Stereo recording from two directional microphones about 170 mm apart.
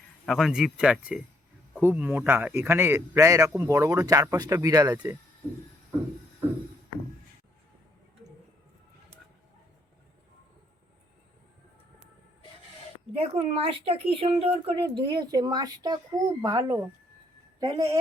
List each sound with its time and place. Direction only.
0.3 s speech: centre (ahead or behind); by 5.1 s 20° right (ahead or behind)
13.1 s speech: 35° right (ahead or behind)